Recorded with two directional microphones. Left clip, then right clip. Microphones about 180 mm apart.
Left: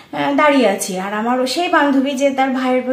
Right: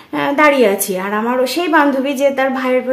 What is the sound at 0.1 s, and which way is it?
A woman's voice, 45° right (ahead or behind).